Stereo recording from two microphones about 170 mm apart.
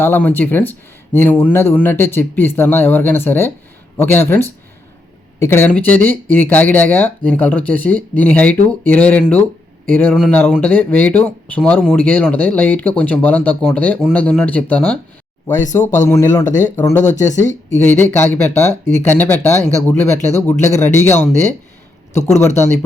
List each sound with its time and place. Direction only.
0.0 s speech: 10° left (ahead or behind)
16.0 s speech: 15° left (ahead or behind)
17.0 s speech: 45° left (ahead or behind)
17.7 s speech: 10° left (ahead or behind)